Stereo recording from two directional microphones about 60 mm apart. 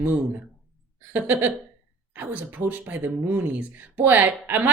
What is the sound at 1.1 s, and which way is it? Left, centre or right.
A woman's voice, right.